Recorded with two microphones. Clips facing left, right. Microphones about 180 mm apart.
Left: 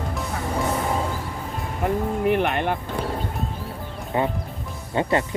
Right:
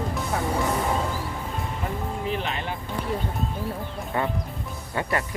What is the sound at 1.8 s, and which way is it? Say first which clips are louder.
Speech: left 11 dB; 60° left (ahead or behind).